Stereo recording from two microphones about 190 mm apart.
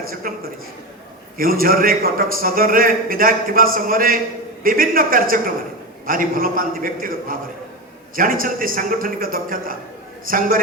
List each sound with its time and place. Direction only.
0.1 s a man's voice: 50° right (ahead or behind)